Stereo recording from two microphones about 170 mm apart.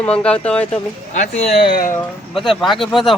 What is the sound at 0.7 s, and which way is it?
Speech, 45° left (ahead or behind).